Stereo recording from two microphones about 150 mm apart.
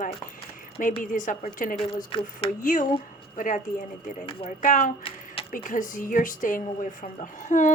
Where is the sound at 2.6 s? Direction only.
65° left (ahead or behind).